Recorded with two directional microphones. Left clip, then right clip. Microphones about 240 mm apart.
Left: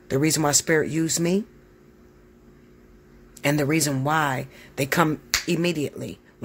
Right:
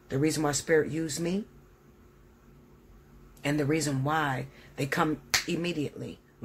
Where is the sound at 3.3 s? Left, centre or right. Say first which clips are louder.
Left 6 dB; left.